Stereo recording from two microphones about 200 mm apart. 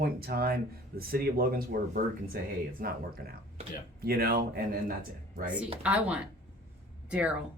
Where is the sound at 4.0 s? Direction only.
50° right (ahead or behind).